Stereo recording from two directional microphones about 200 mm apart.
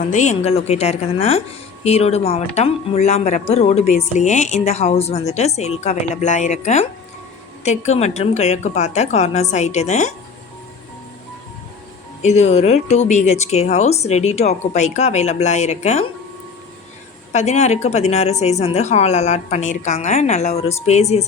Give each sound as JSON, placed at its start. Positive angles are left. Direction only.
{"t": 0.0, "sound": "speech", "side_deg": 35}
{"t": 12.2, "sound": "speech", "side_deg": 35}
{"t": 17.3, "sound": "speech", "side_deg": 35}